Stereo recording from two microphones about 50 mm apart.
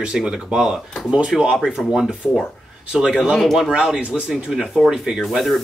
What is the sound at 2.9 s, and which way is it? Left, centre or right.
Speech, centre.